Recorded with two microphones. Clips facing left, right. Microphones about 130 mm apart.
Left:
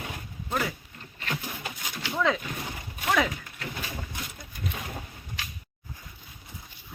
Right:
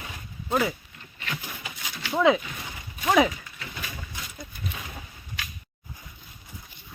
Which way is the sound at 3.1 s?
15° right (ahead or behind).